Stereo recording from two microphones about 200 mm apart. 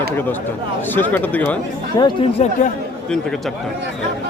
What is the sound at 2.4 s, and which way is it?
Speech, 40° left (ahead or behind).